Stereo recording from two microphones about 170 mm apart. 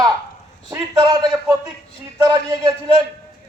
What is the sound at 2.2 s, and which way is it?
Speech, 20° right (ahead or behind).